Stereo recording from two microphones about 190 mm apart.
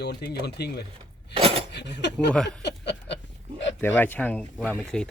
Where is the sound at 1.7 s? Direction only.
65° left (ahead or behind).